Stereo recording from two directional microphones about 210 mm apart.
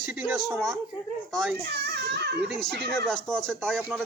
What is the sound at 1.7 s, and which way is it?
Baby cry, 50° right (ahead or behind).